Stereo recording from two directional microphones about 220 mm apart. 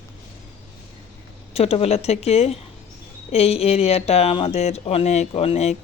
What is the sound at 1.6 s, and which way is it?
Speech, 25° left (ahead or behind).